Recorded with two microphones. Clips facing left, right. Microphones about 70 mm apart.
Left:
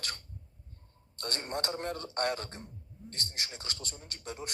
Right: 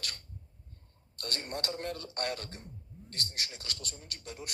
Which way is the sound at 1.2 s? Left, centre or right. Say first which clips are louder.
Left 2 dB; left.